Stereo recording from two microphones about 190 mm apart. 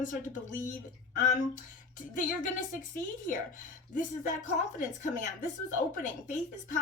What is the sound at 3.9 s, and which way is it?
A woman's voice, 40° left (ahead or behind).